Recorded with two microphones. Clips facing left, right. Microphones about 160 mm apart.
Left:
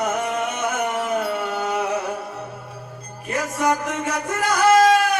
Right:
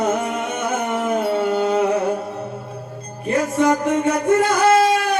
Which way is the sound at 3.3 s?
30° right (ahead or behind).